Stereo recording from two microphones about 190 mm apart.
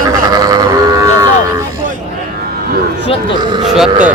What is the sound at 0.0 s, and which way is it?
Livestock, 20° right (ahead or behind).